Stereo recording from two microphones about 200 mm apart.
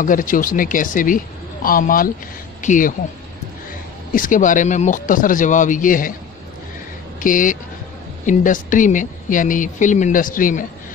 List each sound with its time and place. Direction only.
0.0 s speech: 40° left (ahead or behind)
4.1 s speech: 40° left (ahead or behind)
7.2 s speech: 40° left (ahead or behind)